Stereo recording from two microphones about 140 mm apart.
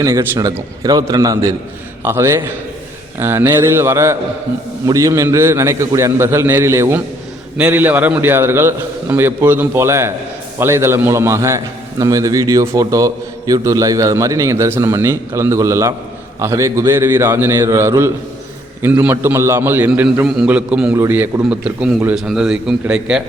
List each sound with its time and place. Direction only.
0.0 s a man's voice: 20° right (ahead or behind); by 23.2 s 5° right (ahead or behind)